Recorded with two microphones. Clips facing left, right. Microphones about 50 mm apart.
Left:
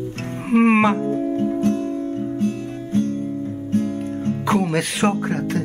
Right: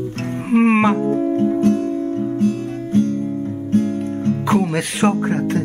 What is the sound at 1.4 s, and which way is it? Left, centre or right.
Music, right.